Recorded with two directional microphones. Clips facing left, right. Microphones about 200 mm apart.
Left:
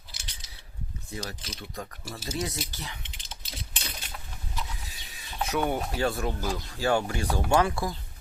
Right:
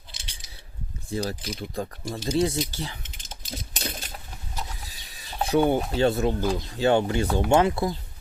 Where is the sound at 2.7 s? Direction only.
30° right (ahead or behind).